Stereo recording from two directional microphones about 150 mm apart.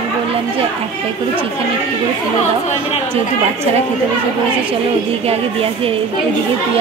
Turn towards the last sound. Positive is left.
turn(degrees=-40)  # may be behind; listen again after turning